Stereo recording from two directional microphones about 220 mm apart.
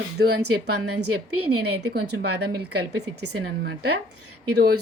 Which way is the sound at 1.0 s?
90° right.